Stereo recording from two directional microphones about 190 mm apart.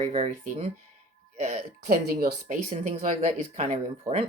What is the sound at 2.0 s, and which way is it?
Speech, 50° right (ahead or behind).